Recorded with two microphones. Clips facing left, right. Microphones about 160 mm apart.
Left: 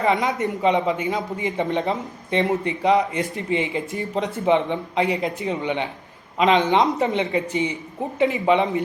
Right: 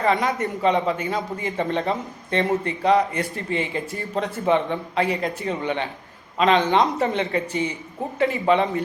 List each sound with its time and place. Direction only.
0.0 s a man's voice: 20° left (ahead or behind)